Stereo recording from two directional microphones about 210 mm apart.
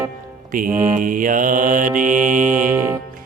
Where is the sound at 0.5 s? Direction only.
40° right (ahead or behind).